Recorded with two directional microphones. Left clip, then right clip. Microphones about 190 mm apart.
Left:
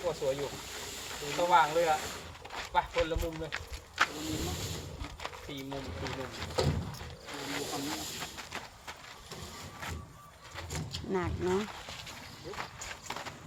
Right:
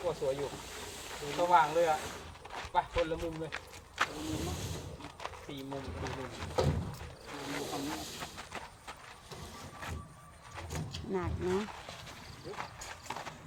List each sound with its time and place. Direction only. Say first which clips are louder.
0.0 s speech: left 1 dB; 25° left (ahead or behind)
2.9 s speech: left 2 dB; 40° left (ahead or behind)
3.4 s keys jangling: left 2 dB; 30° left (ahead or behind)
5.0 s speech: left 2 dB; 25° left (ahead or behind)
7.3 s mechanisms: left 2 dB; 35° left (ahead or behind)
7.6 s snake: left 1 dB; 25° left (ahead or behind)
7.9 s vehicle: left 2 dB; 25° left (ahead or behind)
10.6 s vehicle: left 2 dB; 25° left (ahead or behind)
11.1 s speech: left 2 dB; 45° left (ahead or behind)
12.5 s clip-clop: left 2 dB; 30° left (ahead or behind)